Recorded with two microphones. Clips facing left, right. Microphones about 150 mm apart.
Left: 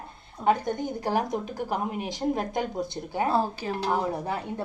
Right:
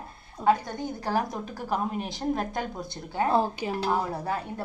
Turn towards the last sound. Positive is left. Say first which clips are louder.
# left 1 dB
turn(degrees=20)  # may be behind; listen again after turning